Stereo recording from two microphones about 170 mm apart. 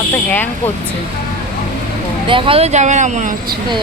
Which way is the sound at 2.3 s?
30° right (ahead or behind).